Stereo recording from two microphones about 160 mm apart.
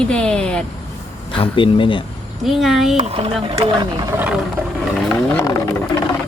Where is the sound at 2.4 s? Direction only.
Centre (ahead or behind).